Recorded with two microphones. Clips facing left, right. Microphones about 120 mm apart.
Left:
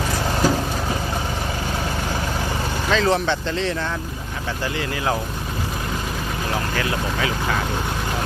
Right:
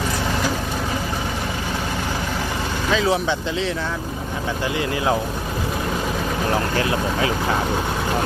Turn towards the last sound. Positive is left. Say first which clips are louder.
# right 2 dB
turn(degrees=-30)  # may be behind; listen again after turning